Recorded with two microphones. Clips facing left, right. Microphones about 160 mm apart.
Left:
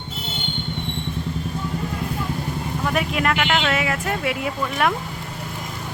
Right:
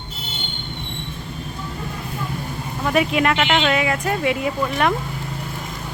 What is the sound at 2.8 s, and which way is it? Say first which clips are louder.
Speech: right 4 dB; centre (ahead or behind).